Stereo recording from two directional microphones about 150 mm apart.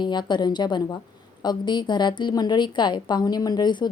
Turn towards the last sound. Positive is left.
turn(degrees=30)  # may be behind; listen again after turning